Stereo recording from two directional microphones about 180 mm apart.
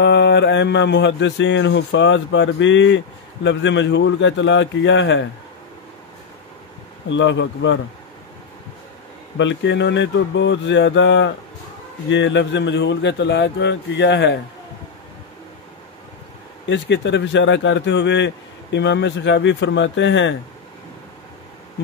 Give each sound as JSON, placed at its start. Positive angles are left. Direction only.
{"t": 0.0, "sound": "a man's voice", "side_deg": 75}
{"t": 7.1, "sound": "speech", "side_deg": 90}
{"t": 9.4, "sound": "a man's voice", "side_deg": 90}
{"t": 16.6, "sound": "a man's voice", "side_deg": 80}